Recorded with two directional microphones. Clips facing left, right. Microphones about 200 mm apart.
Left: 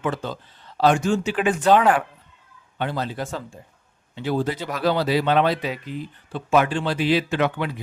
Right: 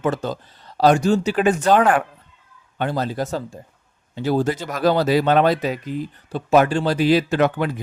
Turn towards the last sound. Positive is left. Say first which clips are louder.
# right 4 dB
turn(degrees=-45)  # may be behind; listen again after turning